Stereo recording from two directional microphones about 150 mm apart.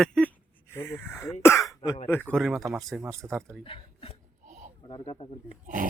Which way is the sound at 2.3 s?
Centre (ahead or behind).